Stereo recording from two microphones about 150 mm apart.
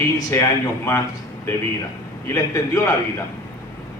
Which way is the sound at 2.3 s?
20° left (ahead or behind).